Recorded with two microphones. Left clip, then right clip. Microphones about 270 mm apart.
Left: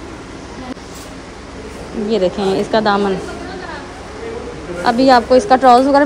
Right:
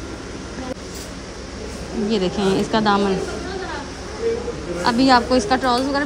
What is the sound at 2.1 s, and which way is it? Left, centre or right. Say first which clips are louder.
A woman's voice: left 5 dB; centre.